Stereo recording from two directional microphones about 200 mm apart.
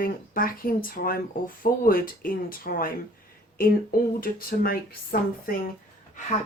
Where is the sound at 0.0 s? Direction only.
45° left (ahead or behind).